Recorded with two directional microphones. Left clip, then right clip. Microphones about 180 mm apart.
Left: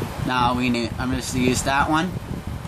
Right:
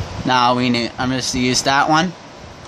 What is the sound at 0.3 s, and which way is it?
Speech, 45° right (ahead or behind).